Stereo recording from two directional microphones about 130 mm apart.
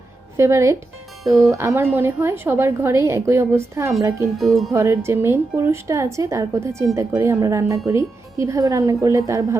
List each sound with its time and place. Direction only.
0.3 s a woman's voice: 20° right (ahead or behind)
4.4 s speech: centre (ahead or behind)
4.7 s a woman's voice: 20° right (ahead or behind)